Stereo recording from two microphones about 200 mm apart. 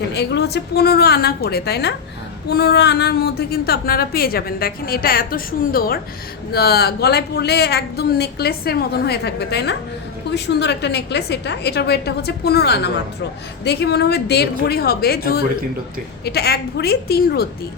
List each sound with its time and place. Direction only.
0.1 s a woman's voice: 55° left (ahead or behind)